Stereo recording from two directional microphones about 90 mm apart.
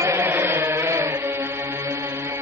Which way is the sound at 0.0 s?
25° right (ahead or behind).